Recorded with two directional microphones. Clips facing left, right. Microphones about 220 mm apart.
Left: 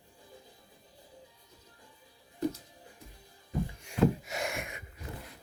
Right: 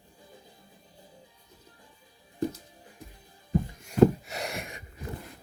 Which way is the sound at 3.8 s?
45° right (ahead or behind).